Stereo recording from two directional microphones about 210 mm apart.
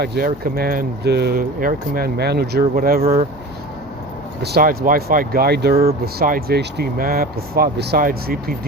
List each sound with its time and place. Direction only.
0.0 s speech: 45° right (ahead or behind)
4.4 s speech: 50° right (ahead or behind)